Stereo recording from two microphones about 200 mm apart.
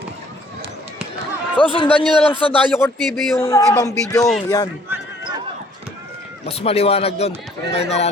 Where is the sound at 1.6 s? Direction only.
25° left (ahead or behind).